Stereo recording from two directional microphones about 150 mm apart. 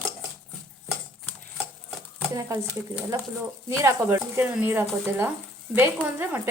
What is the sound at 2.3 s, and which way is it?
Speech, 25° right (ahead or behind).